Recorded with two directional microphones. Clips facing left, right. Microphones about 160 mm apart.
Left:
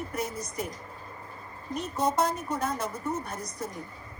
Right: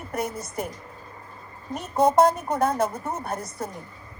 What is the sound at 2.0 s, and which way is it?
Speech, 55° right (ahead or behind).